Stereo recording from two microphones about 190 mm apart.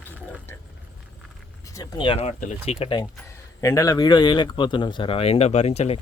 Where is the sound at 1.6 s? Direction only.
20° left (ahead or behind); by 2.5 s 35° left (ahead or behind).